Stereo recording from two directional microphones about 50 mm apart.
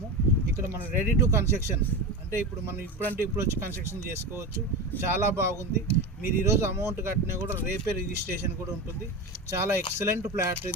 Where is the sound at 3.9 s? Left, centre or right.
Right.